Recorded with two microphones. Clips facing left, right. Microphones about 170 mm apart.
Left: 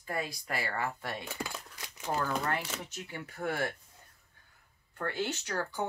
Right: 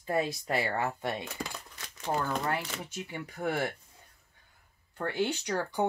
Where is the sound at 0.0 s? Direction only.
25° right (ahead or behind).